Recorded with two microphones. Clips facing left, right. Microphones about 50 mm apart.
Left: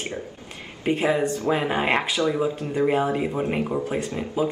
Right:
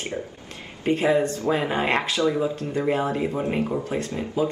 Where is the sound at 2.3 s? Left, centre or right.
Left.